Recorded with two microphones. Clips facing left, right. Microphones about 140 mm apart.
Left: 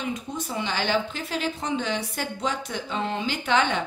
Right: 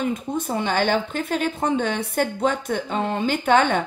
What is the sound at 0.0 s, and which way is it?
Speech, 50° right (ahead or behind).